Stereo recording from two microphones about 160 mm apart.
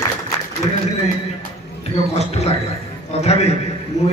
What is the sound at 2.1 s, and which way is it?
A man's voice, 40° left (ahead or behind).